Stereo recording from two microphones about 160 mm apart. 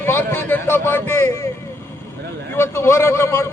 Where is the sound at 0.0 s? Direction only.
15° left (ahead or behind).